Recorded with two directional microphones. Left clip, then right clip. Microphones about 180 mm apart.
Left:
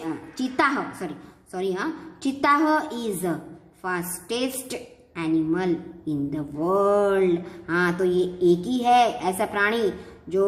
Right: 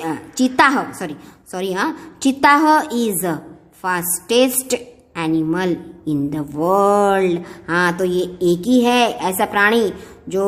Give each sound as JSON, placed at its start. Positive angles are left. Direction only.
{"t": 0.0, "sound": "a woman's voice", "side_deg": -45}